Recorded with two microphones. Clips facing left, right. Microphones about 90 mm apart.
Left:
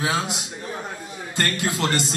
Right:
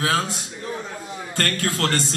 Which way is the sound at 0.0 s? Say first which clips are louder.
Right 2 dB; 15° left (ahead or behind).